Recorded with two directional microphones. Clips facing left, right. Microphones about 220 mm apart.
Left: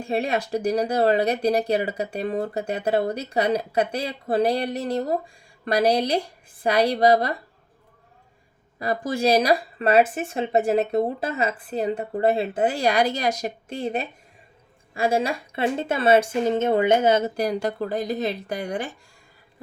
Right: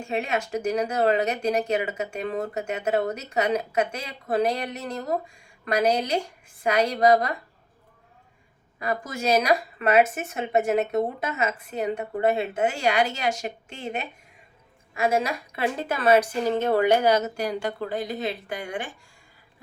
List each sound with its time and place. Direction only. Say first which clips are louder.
0.0 s speech: left 3 dB; 35° left (ahead or behind)
8.8 s speech: left 5 dB; 35° left (ahead or behind)